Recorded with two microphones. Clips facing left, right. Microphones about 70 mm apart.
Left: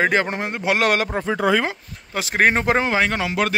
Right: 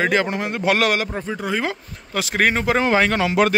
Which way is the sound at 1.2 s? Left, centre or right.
Left.